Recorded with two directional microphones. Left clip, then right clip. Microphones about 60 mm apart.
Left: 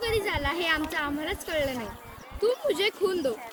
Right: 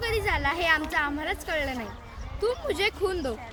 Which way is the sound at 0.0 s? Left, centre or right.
Right.